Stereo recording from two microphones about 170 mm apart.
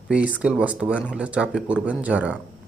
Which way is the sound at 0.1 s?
10° right (ahead or behind).